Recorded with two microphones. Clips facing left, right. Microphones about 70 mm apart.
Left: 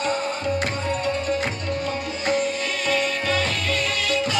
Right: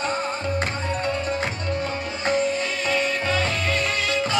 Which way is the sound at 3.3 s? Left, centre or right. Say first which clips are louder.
Even; right.